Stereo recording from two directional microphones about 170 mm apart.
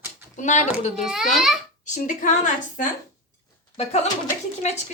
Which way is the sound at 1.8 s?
50° left (ahead or behind).